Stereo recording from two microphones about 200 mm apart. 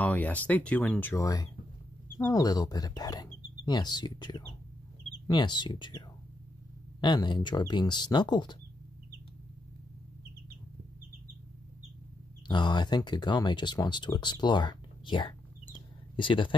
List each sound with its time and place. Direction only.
0.0 s speech: 10° left (ahead or behind)
12.4 s speech: 20° left (ahead or behind)
15.7 s a sound: 25° left (ahead or behind)